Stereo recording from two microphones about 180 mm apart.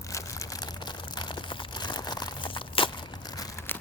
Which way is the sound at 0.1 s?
20° left (ahead or behind).